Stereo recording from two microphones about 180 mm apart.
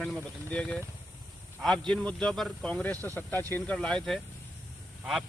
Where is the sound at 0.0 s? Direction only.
5° left (ahead or behind).